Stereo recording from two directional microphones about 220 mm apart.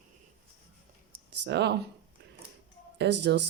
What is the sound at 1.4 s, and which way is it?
Speech, 50° right (ahead or behind).